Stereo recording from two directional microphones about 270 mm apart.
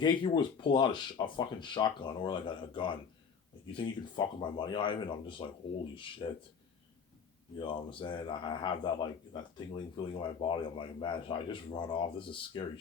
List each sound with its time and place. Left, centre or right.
0.0 s speech: centre
7.6 s speech: centre